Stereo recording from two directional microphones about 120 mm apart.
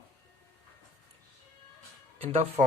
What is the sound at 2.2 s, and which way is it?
Speech, 55° right (ahead or behind).